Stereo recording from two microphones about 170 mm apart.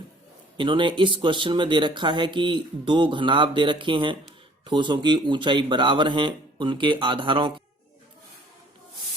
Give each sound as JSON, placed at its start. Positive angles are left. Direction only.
{"t": 0.5, "sound": "speech", "side_deg": -30}